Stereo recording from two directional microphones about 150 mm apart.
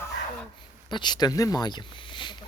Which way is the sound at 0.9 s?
30° left (ahead or behind).